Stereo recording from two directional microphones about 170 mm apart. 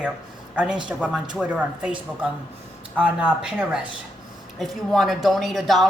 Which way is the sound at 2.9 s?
10° right (ahead or behind).